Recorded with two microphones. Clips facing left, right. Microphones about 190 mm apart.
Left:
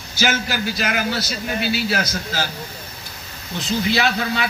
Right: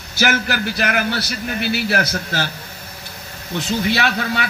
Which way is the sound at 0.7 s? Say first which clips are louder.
Right 2 dB; 60° right (ahead or behind).